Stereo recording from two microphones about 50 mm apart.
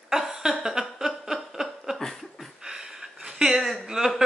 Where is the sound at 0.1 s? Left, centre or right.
Centre.